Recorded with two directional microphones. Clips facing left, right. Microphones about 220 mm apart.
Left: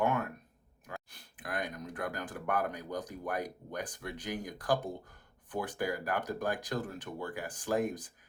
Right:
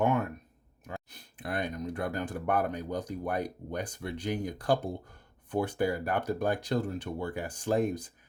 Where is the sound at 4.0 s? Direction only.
25° right (ahead or behind).